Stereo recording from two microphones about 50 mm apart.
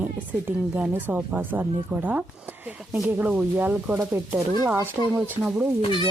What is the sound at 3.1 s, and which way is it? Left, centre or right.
Speech, right.